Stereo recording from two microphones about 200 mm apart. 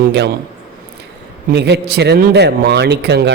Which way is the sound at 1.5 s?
55° right (ahead or behind).